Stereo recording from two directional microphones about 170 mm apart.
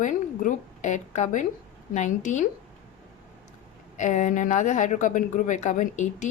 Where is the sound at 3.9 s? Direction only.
45° left (ahead or behind).